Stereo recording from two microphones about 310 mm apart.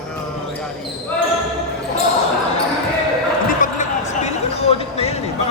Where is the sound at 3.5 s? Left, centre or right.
Left.